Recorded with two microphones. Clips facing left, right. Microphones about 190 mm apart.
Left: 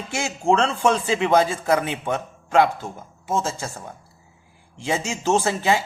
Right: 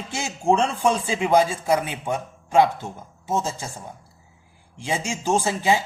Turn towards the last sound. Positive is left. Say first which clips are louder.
# left 1 dB
turn(degrees=-15)  # may be behind; listen again after turning